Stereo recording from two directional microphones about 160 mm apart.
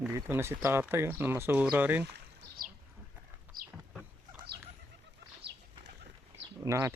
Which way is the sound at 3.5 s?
65° right (ahead or behind).